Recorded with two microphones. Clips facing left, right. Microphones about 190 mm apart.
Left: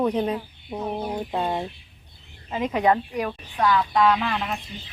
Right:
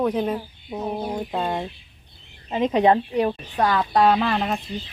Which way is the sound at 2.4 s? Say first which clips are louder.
Right 3 dB; 25° right (ahead or behind).